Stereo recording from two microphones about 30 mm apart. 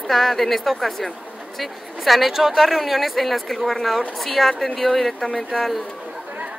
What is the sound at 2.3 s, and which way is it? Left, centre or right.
A woman's voice, centre.